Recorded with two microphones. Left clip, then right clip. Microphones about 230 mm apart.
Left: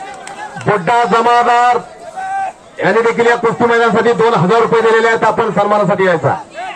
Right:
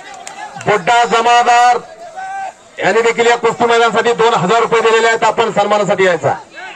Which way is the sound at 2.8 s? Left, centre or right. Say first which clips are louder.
Even; right.